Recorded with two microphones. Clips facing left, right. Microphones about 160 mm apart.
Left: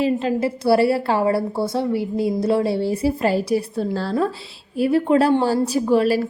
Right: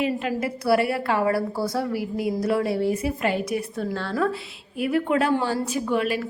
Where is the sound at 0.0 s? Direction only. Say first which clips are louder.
Left 5 dB; 30° left (ahead or behind).